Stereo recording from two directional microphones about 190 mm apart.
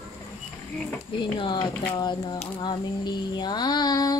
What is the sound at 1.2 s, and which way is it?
Female singing, 25° left (ahead or behind).